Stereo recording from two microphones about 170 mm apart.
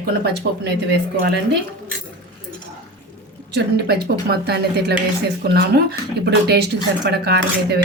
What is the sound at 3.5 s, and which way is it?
Speech, 75° right (ahead or behind).